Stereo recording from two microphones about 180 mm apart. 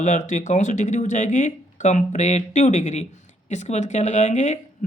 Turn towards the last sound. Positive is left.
turn(degrees=40)  # may be behind; listen again after turning